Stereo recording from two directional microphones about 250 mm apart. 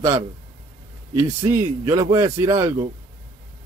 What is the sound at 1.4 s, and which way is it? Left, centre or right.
A man's voice, centre.